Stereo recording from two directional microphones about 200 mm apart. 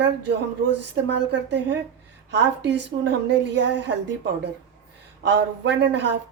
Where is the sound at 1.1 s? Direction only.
60° right (ahead or behind).